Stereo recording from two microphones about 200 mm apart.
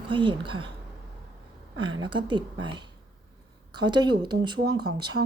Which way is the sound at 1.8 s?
25° right (ahead or behind).